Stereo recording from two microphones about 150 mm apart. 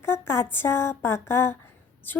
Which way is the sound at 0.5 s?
15° left (ahead or behind).